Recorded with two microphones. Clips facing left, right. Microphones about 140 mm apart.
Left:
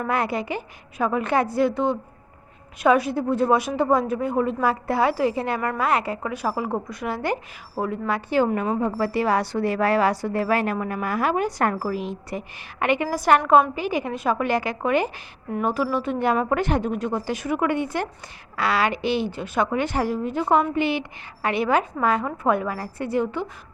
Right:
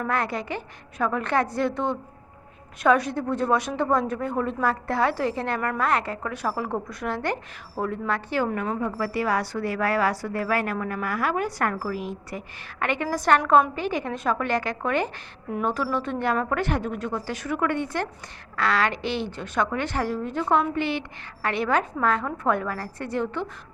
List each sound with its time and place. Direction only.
0.0 s a woman's voice: 10° left (ahead or behind)